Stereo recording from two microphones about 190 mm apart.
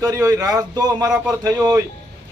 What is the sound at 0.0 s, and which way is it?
A man's voice, 20° right (ahead or behind).